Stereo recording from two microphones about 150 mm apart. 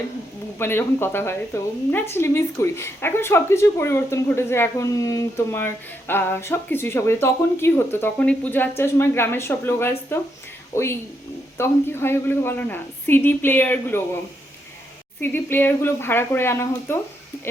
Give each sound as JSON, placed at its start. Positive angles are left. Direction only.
{"t": 0.6, "sound": "a woman's voice", "side_deg": 15}
{"t": 15.2, "sound": "a woman's voice", "side_deg": 15}